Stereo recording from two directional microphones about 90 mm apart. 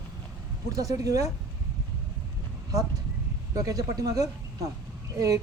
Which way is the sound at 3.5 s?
40° right (ahead or behind).